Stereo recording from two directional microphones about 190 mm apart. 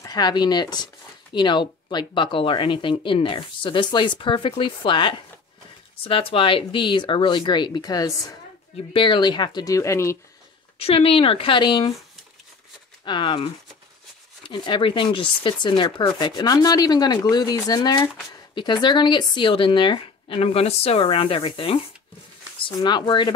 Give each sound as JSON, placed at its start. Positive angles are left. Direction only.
{"t": 0.0, "sound": "speech", "side_deg": 20}
{"t": 10.8, "sound": "speech", "side_deg": 30}
{"t": 13.0, "sound": "speech", "side_deg": 25}